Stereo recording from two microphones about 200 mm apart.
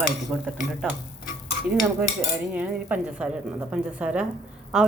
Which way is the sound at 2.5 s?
5° right (ahead or behind).